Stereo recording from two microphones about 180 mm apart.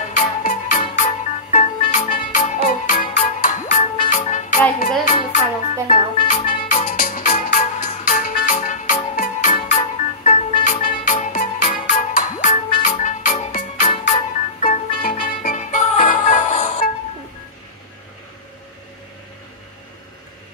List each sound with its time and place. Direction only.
0.1 s music: 45° left (ahead or behind)